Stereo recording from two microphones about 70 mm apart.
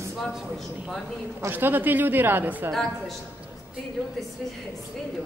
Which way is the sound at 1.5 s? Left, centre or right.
Right.